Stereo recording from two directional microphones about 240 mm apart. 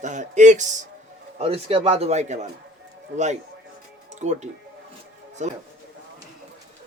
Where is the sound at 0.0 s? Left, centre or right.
Right.